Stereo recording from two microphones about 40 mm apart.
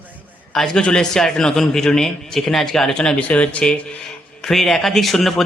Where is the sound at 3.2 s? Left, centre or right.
Left.